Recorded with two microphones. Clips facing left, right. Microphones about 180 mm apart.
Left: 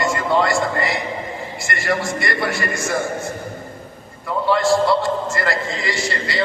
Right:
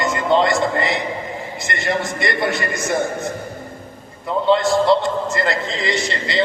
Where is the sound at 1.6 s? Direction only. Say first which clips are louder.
Even; 20° right (ahead or behind).